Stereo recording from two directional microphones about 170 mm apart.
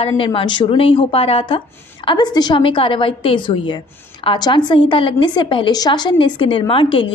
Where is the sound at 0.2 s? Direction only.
30° left (ahead or behind).